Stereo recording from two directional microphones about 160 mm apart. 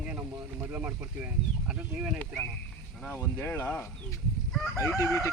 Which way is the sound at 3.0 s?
15° left (ahead or behind).